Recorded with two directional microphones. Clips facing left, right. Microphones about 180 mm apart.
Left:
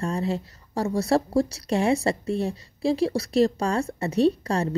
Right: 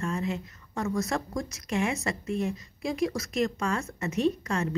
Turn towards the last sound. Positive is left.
turn(degrees=35)  # may be behind; listen again after turning